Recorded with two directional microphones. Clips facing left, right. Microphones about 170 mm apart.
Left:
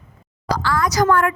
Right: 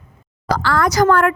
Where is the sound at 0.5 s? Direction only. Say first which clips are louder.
Right 3 dB; 60° right (ahead or behind).